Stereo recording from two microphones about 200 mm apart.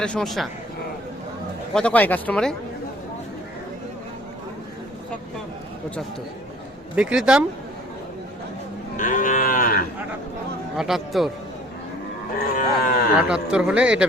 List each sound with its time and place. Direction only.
0.0 s speech: 5° left (ahead or behind)
1.7 s speech: 5° left (ahead or behind)
6.9 s speech: 5° right (ahead or behind)
9.0 s cattle: 40° left (ahead or behind)
10.8 s speech: centre (ahead or behind)
12.5 s cattle: 45° left (ahead or behind)
13.1 s speech: 5° right (ahead or behind)